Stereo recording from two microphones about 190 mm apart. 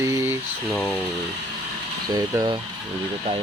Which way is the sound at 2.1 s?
20° right (ahead or behind).